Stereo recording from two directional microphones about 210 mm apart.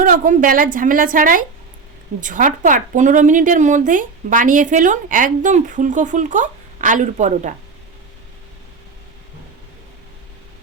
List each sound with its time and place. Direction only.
0.0 s a woman's voice: 40° right (ahead or behind)